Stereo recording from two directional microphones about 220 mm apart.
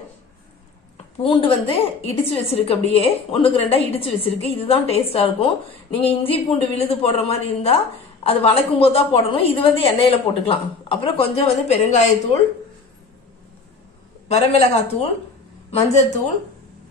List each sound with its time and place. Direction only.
1.2 s a woman's voice: 25° left (ahead or behind)
14.3 s a woman's voice: 30° left (ahead or behind)